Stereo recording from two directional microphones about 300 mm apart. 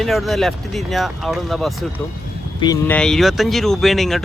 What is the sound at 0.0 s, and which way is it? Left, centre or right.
Speech, centre.